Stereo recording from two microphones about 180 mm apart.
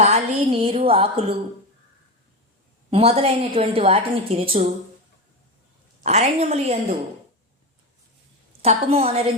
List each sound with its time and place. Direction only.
0.0 s a woman's voice: 35° right (ahead or behind)
2.9 s a woman's voice: 35° right (ahead or behind)
6.0 s a woman's voice: 40° right (ahead or behind)
8.6 s a woman's voice: 35° right (ahead or behind)